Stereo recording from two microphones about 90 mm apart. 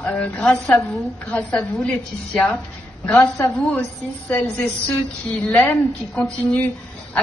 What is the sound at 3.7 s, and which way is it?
A woman's voice, 15° left (ahead or behind).